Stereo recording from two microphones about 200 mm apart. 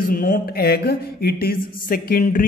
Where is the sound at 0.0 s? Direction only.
45° left (ahead or behind).